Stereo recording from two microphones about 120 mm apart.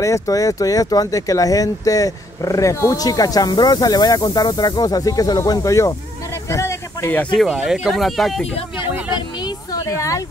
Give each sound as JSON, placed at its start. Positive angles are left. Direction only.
{"t": 0.0, "sound": "speech", "side_deg": 25}
{"t": 7.3, "sound": "speech", "side_deg": -5}
{"t": 9.4, "sound": "a sound", "side_deg": 30}